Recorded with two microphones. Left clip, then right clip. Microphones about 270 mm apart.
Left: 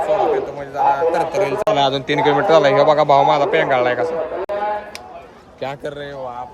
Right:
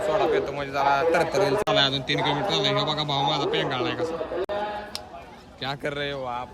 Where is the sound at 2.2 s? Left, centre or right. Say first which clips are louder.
Left 13 dB; centre.